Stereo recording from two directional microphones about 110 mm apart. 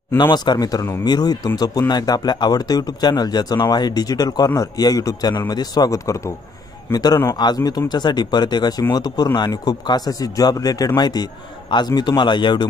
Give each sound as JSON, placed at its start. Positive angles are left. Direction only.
{"t": 0.2, "sound": "speech", "side_deg": 40}